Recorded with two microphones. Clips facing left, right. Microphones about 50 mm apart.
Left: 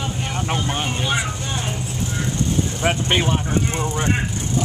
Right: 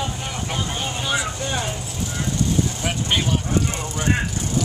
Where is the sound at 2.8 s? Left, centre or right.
Left.